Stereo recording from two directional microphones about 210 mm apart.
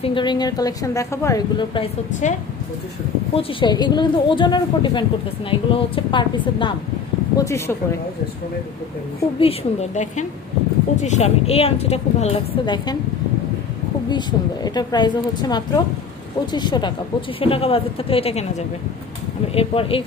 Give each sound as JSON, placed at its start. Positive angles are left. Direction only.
{"t": 0.0, "sound": "a woman's voice", "side_deg": 25}
{"t": 3.3, "sound": "a woman's voice", "side_deg": 20}
{"t": 9.4, "sound": "a woman's voice", "side_deg": 30}
{"t": 14.1, "sound": "a woman's voice", "side_deg": 20}
{"t": 19.5, "sound": "a woman's voice", "side_deg": 25}